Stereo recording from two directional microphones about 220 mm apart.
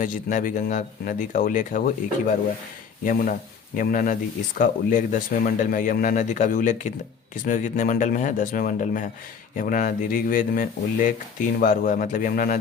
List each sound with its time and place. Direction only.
0.0 s speech: 35° left (ahead or behind)
3.0 s speech: 40° left (ahead or behind)